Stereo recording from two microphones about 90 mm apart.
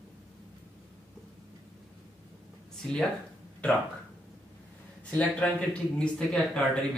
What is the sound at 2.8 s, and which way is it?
Speech, 5° left (ahead or behind).